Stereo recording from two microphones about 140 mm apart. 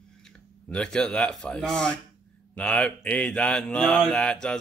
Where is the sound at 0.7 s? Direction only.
5° left (ahead or behind).